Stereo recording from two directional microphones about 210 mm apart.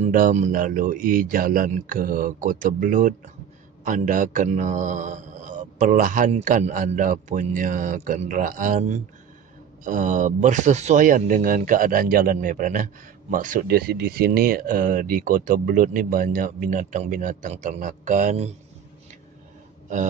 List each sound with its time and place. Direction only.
0.0 s speech: 40° right (ahead or behind)